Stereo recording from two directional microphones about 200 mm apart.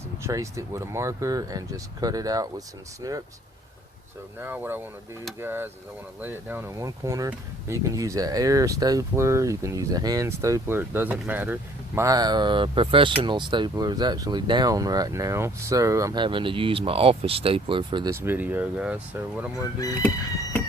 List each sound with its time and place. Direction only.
0.2 s speech: 15° right (ahead or behind)
4.4 s speech: 10° right (ahead or behind)
18.1 s speech: 10° right (ahead or behind)